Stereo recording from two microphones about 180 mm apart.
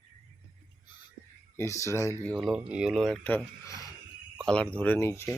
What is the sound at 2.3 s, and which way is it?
Speech, centre (ahead or behind).